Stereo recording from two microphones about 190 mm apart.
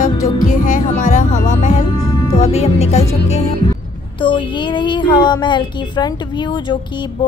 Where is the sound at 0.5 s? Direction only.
40° left (ahead or behind).